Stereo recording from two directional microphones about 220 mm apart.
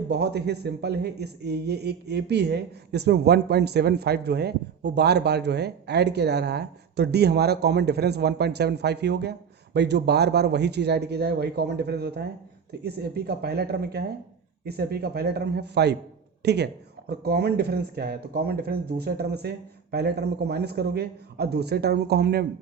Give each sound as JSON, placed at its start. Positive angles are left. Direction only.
{"t": 0.1, "sound": "a man's voice", "side_deg": -50}